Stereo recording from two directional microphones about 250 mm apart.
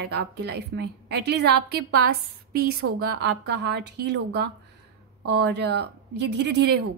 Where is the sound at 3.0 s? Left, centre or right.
Right.